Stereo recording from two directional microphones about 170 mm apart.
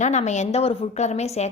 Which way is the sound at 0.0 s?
45° left (ahead or behind).